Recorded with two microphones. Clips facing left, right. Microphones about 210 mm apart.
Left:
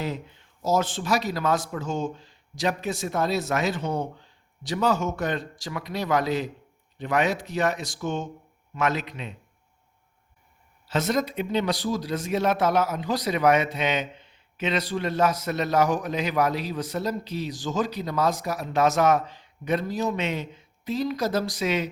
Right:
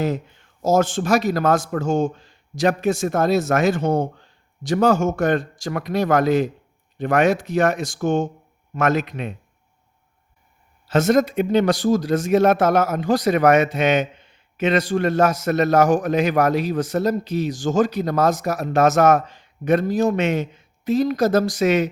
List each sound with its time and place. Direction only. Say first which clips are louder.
0.6 s a man's voice: right 6 dB; 45° right (ahead or behind)
10.8 s a man's voice: right 8 dB; 45° right (ahead or behind)